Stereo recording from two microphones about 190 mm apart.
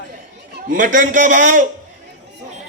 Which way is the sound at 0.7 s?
40° right (ahead or behind).